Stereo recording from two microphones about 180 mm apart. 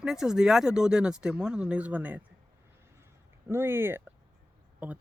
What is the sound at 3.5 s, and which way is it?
Speech, 15° right (ahead or behind).